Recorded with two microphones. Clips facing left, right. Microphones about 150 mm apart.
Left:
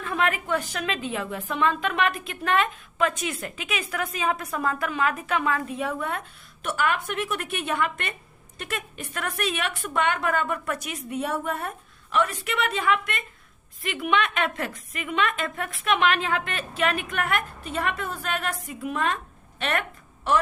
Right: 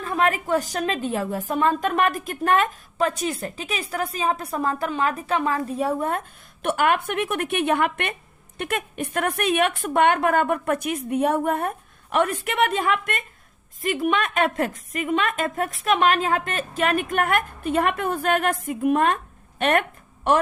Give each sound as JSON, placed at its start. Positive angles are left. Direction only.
{"t": 0.2, "sound": "a woman's voice", "side_deg": -40}